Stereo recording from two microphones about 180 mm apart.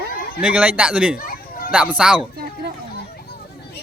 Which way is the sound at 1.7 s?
10° right (ahead or behind).